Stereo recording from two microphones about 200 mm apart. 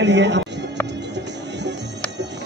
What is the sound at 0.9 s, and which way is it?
Music, 60° right (ahead or behind).